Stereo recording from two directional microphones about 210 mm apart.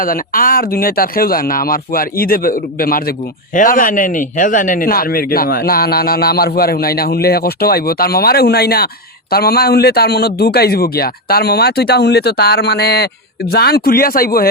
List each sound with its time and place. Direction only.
0.0 s speech: 40° left (ahead or behind)